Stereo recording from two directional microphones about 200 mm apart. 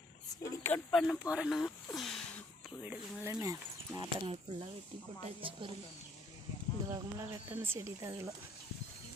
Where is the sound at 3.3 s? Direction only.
15° right (ahead or behind).